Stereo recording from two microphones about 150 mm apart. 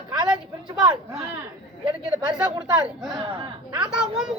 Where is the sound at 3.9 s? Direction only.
5° right (ahead or behind).